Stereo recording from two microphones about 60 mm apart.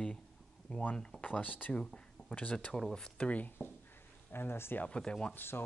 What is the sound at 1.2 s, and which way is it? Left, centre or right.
Speech, left.